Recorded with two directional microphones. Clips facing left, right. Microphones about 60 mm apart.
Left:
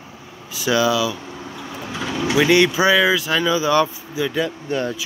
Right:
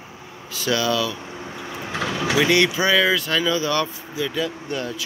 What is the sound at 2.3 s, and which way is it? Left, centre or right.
Speech, centre.